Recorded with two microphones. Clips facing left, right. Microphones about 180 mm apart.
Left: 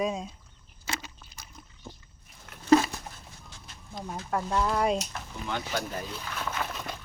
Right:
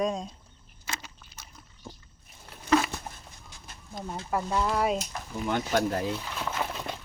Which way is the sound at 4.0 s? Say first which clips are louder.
Right 1 dB; 50° right (ahead or behind).